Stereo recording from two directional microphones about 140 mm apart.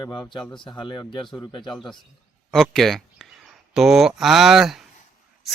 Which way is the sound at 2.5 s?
Centre (ahead or behind).